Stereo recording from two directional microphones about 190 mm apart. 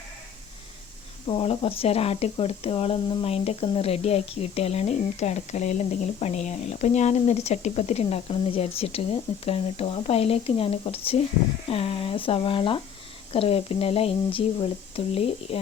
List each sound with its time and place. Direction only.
1.3 s speech: 30° left (ahead or behind)